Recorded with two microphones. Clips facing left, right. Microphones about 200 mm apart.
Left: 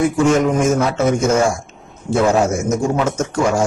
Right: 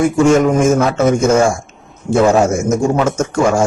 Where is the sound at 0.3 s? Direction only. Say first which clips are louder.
Right 5 dB; 50° right (ahead or behind).